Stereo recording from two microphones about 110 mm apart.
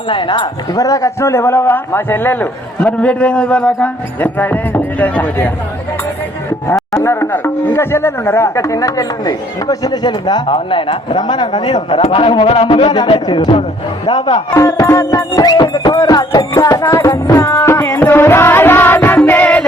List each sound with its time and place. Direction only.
0.1 s a man's voice: 45° left (ahead or behind); by 5.5 s 15° left (ahead or behind)
7.0 s speech: 20° left (ahead or behind); by 10.4 s 40° left (ahead or behind)
10.4 s a man's voice: 55° left (ahead or behind)
14.5 s speech: 25° left (ahead or behind)
15.5 s speech: 40° left (ahead or behind)
17.6 s music: 20° left (ahead or behind)